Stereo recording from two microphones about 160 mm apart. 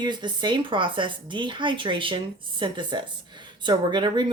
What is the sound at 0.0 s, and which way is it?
Speech, 30° right (ahead or behind).